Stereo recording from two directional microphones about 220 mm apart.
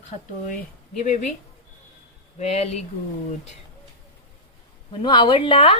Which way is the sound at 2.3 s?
30° left (ahead or behind).